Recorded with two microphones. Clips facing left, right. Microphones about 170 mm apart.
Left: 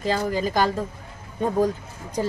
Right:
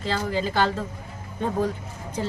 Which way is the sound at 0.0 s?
45° left (ahead or behind).